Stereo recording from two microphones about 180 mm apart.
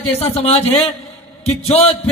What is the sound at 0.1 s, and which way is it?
A man's voice, 35° left (ahead or behind).